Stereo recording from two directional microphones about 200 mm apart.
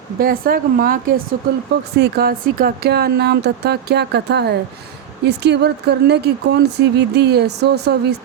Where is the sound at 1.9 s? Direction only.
55° right (ahead or behind).